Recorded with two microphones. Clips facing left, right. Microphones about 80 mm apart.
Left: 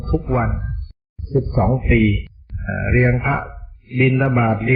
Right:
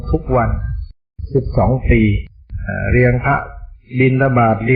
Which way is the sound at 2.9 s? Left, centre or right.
Right.